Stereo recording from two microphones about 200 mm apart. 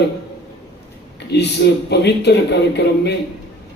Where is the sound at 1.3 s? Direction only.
55° left (ahead or behind).